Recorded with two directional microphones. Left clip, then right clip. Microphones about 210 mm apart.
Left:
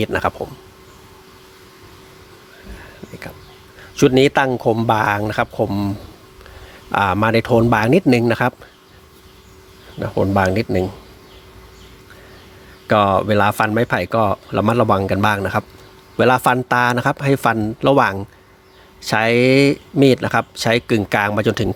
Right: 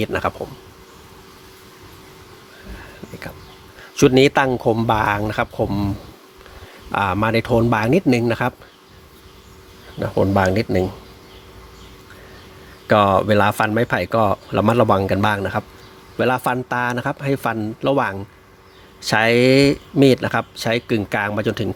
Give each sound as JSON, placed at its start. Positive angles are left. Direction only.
{"t": 0.0, "sound": "speech", "side_deg": 15}
{"t": 3.1, "sound": "a sound", "side_deg": 0}
{"t": 3.8, "sound": "speech", "side_deg": 0}
{"t": 6.9, "sound": "speech", "side_deg": 15}
{"t": 10.0, "sound": "speech", "side_deg": 5}
{"t": 12.9, "sound": "speech", "side_deg": 5}
{"t": 19.0, "sound": "speech", "side_deg": 5}